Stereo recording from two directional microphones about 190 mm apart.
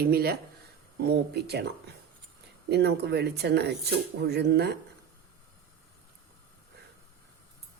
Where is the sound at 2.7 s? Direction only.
60° right (ahead or behind).